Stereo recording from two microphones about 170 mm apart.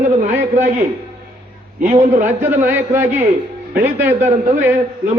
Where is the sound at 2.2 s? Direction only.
10° right (ahead or behind).